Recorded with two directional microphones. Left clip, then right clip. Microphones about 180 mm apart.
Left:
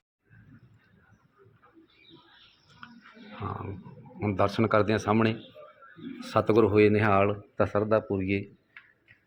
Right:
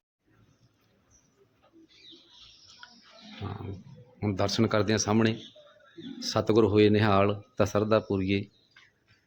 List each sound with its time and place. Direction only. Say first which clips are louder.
3.4 s wild animals: left 5 dB; 10° right (ahead or behind)
4.2 s speech: left 2 dB; 15° right (ahead or behind)
6.5 s speech: even; 20° right (ahead or behind)